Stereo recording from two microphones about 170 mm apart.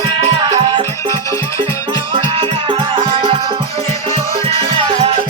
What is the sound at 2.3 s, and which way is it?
Music, 35° right (ahead or behind).